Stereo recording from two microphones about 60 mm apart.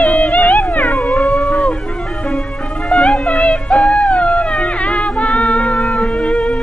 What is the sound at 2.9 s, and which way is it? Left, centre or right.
Music, centre.